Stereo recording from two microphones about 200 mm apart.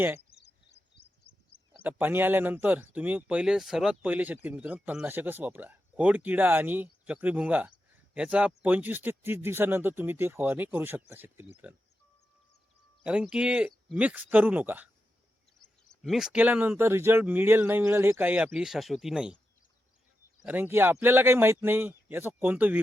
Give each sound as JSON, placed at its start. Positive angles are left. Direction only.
{"t": 0.3, "sound": "a sound", "side_deg": 50}
{"t": 1.8, "sound": "speech", "side_deg": -10}
{"t": 13.1, "sound": "speech", "side_deg": -5}
{"t": 15.6, "sound": "speech", "side_deg": 0}
{"t": 20.4, "sound": "speech", "side_deg": -10}